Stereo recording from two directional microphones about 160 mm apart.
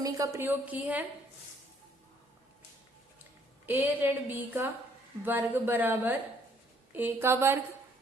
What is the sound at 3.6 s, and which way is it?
A woman's voice, 10° right (ahead or behind).